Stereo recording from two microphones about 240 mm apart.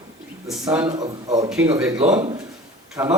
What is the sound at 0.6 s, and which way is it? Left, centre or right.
Speech, centre.